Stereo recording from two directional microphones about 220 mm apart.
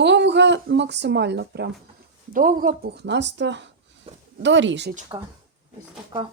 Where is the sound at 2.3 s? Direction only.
40° right (ahead or behind).